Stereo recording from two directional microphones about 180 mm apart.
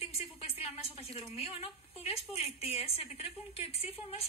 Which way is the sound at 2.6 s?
35° left (ahead or behind).